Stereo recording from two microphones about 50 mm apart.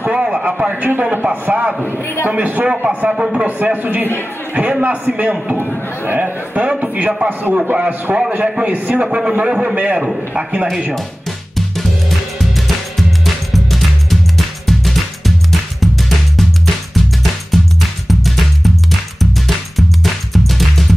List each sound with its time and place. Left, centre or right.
0.1 s a sound: centre
0.8 s a man's voice: right
3.1 s a man's voice: centre
3.4 s a man's voice: right; by 9.8 s centre
9.8 s a man's voice: right
13.2 s music: centre
20.0 s music: centre